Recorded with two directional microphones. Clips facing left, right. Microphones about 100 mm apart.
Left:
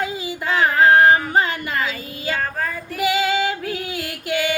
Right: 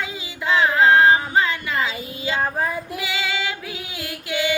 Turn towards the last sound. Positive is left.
turn(degrees=45)  # may be behind; listen again after turning